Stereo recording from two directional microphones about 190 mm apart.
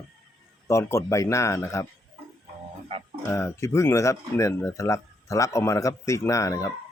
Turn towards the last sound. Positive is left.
turn(degrees=15)  # may be behind; listen again after turning